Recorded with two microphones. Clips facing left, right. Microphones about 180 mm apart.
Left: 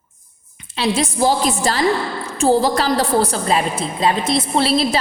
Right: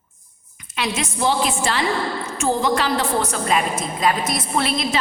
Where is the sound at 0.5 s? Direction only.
30° left (ahead or behind).